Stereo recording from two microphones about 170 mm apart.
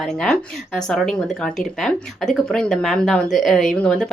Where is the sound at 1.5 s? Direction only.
Centre (ahead or behind).